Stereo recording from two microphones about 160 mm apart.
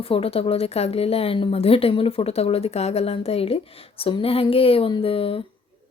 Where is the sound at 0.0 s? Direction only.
35° left (ahead or behind).